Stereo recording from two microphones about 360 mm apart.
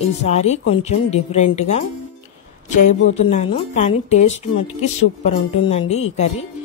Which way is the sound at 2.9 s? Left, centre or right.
Centre.